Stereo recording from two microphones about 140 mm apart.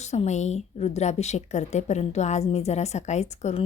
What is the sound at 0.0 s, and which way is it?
Speech, 55° left (ahead or behind).